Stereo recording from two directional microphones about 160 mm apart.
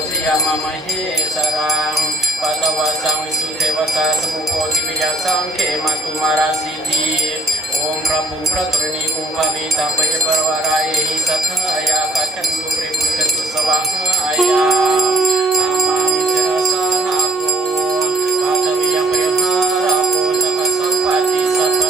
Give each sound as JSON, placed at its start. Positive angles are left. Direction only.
{"t": 1.7, "sound": "jingle bell", "side_deg": 0}
{"t": 14.3, "sound": "music", "side_deg": 0}
{"t": 19.0, "sound": "music", "side_deg": 0}
{"t": 21.5, "sound": "music", "side_deg": 0}